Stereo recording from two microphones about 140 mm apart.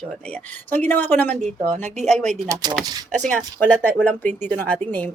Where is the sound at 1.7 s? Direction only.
55° right (ahead or behind).